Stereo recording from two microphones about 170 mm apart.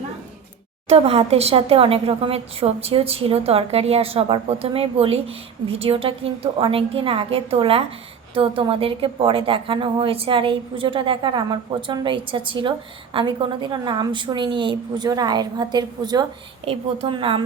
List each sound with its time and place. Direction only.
0.9 s a woman's voice: 35° right (ahead or behind)